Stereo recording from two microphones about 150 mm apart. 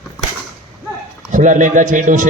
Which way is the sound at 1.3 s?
60° right (ahead or behind).